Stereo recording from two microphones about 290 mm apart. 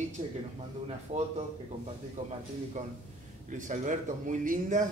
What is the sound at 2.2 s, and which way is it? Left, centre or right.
A man's voice, right.